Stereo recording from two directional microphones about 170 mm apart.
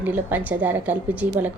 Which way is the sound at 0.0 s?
10° right (ahead or behind).